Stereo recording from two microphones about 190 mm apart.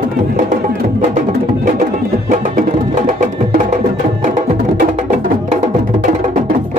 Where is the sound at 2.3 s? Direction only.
45° right (ahead or behind).